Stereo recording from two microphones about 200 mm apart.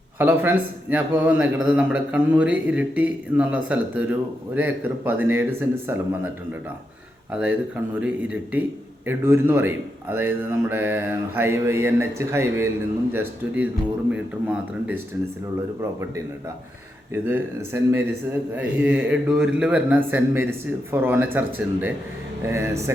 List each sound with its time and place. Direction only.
0.2 s a man's voice: 10° right (ahead or behind)
7.9 s a man's voice: 5° right (ahead or behind)
14.1 s a man's voice: 5° right (ahead or behind)
17.2 s a man's voice: 10° right (ahead or behind)